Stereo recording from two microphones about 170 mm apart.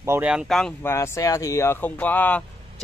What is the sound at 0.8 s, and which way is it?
Speech, 15° left (ahead or behind).